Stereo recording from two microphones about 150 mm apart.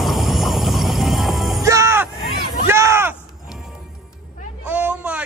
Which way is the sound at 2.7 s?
15° right (ahead or behind).